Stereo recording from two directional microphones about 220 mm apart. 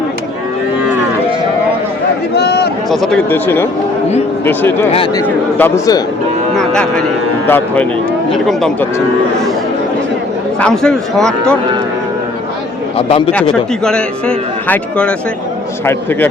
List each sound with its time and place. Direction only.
2.3 s a sound: 45° left (ahead or behind)
2.9 s speech: centre (ahead or behind)
4.9 s speech: 25° left (ahead or behind)
5.2 s speech: 10° left (ahead or behind)
6.6 s a man's voice: 5° left (ahead or behind)
10.6 s a man's voice: 5° left (ahead or behind)
13.0 s speech: 25° left (ahead or behind)
13.3 s a man's voice: 5° left (ahead or behind)